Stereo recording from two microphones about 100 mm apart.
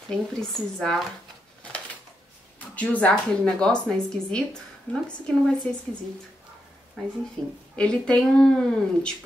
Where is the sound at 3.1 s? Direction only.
5° left (ahead or behind).